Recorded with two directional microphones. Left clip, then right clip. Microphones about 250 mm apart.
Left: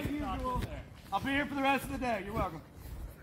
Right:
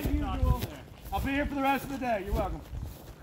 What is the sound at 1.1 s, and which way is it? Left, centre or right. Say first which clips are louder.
Speech: right 1 dB; centre.